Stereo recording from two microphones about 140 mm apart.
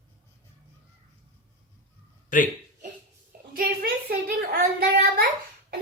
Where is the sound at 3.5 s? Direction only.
90° right.